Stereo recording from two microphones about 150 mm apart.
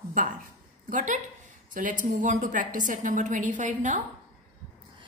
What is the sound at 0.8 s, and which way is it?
A woman's voice, 60° right (ahead or behind).